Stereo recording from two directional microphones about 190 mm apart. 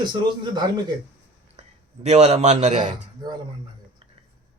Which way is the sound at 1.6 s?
35° right (ahead or behind).